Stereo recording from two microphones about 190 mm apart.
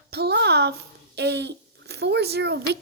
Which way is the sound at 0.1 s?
60° right (ahead or behind).